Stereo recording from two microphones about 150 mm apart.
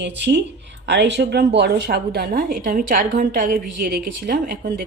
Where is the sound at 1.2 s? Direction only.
90° right.